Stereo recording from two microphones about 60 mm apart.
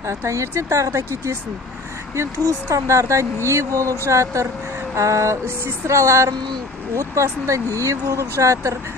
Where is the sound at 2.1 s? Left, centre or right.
Right.